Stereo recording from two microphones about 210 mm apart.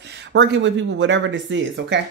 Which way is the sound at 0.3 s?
60° right (ahead or behind).